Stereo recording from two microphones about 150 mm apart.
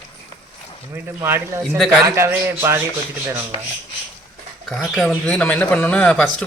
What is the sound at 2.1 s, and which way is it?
Speech, 15° right (ahead or behind).